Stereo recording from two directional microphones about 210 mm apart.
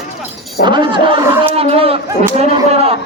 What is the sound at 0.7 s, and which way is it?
Speech, 20° right (ahead or behind).